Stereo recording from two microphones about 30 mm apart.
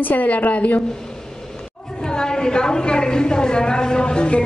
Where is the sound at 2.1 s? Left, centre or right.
Left.